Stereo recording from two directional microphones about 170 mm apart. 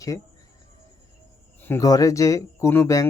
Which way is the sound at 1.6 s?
15° left (ahead or behind).